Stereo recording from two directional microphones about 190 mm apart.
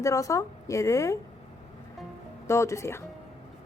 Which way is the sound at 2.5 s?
15° left (ahead or behind).